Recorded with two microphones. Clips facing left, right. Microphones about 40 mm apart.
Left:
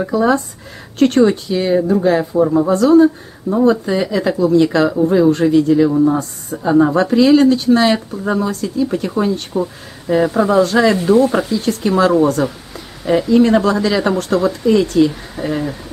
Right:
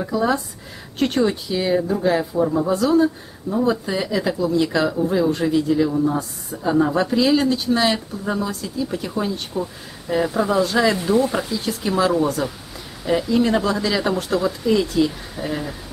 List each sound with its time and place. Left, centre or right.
0.1 s speech: centre
0.9 s speech: centre
6.6 s speech: centre